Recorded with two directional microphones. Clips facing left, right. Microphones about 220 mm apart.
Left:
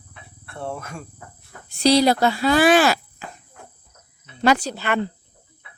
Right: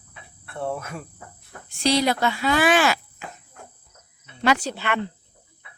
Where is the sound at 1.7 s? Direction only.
35° left (ahead or behind).